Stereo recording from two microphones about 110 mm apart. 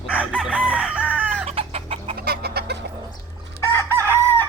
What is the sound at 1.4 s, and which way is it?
Chicken, 70° right (ahead or behind).